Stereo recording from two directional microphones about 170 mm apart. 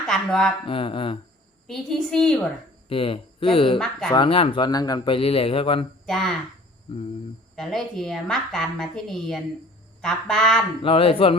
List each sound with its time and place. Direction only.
0.1 s a woman's voice: 5° left (ahead or behind)
0.7 s a man's voice: 30° left (ahead or behind)
1.6 s a woman's voice: centre (ahead or behind)
2.9 s a man's voice: 30° left (ahead or behind)
6.1 s a woman's voice: centre (ahead or behind)
7.5 s a woman's voice: centre (ahead or behind)
10.8 s a man's voice: 30° left (ahead or behind)